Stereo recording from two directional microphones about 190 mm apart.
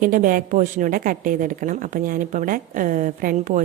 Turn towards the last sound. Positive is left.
turn(degrees=-45)  # may be behind; listen again after turning